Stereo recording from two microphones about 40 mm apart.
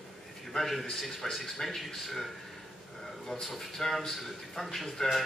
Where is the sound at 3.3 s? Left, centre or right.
Centre.